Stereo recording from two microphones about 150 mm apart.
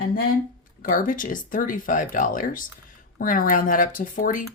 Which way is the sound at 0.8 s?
65° left (ahead or behind).